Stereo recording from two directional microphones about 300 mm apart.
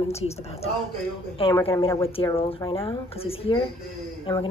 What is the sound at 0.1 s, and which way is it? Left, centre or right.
A woman's voice, centre.